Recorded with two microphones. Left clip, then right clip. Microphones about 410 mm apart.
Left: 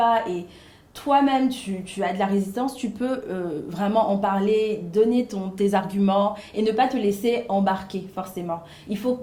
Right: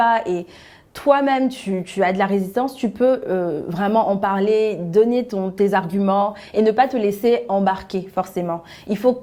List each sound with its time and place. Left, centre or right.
0.0 s a woman's voice: right